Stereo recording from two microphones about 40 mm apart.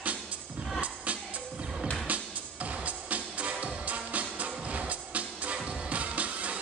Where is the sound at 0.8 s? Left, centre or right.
Right.